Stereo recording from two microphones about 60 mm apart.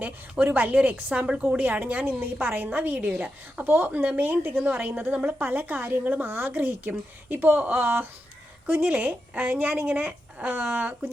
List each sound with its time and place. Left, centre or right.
0.0 s a woman's voice: right